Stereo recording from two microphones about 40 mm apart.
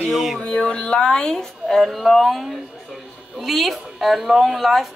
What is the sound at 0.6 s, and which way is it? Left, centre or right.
Speech, centre.